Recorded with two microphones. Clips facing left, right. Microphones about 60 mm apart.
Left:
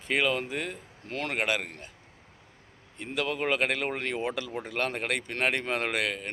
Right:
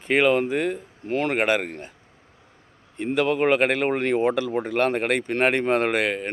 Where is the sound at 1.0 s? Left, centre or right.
Right.